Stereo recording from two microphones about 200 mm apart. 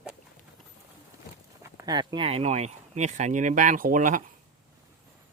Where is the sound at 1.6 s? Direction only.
20° right (ahead or behind); by 4.2 s 40° right (ahead or behind).